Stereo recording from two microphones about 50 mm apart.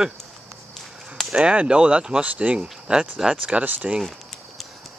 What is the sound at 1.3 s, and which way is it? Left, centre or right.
Speech, right.